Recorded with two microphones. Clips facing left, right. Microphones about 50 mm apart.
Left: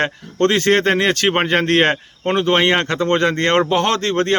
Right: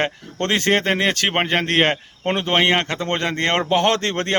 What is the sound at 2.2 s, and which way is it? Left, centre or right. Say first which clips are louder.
Speech: left 3 dB; centre.